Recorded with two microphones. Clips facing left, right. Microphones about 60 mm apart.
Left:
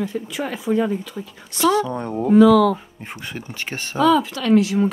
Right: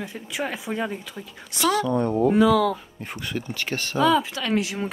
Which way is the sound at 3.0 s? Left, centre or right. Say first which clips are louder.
Right 1 dB; left.